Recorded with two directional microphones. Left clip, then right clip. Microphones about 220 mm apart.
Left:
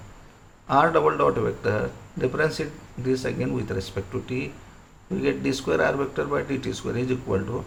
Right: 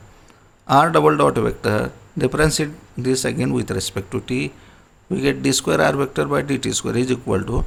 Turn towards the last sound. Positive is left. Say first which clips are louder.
# right 5 dB
turn(degrees=-50)  # may be behind; listen again after turning